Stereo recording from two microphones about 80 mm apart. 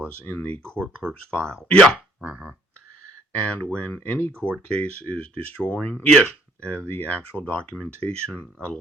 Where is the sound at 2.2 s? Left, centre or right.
Centre.